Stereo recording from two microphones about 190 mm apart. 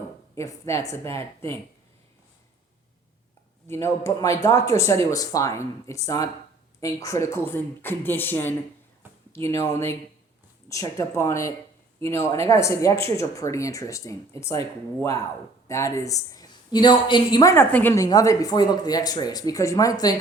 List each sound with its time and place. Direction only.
0.3 s speech: 15° left (ahead or behind)
3.7 s speech: 15° left (ahead or behind)
15.6 s speech: 15° left (ahead or behind)